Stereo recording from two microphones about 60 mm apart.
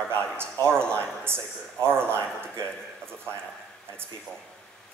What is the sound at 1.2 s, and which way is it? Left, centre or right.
Speech, right.